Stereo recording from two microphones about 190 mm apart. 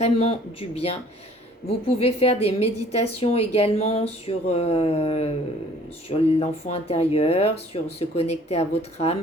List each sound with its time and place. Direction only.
0.0 s a woman's voice: 35° left (ahead or behind)